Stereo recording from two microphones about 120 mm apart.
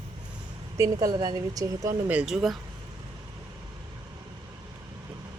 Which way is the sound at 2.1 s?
10° right (ahead or behind).